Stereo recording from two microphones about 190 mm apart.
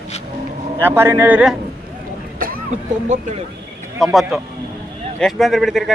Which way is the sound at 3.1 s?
40° right (ahead or behind).